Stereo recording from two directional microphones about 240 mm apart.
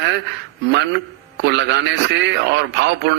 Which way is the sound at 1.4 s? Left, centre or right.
Right.